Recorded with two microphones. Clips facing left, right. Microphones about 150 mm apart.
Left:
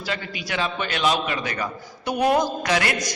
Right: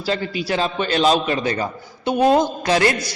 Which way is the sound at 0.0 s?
30° right (ahead or behind).